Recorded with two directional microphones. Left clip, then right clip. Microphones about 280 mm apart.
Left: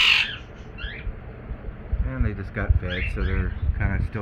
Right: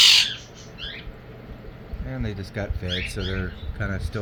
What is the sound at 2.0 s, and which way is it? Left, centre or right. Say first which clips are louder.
Speech: even; right.